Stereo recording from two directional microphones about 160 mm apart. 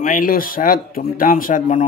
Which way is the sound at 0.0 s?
60° left (ahead or behind).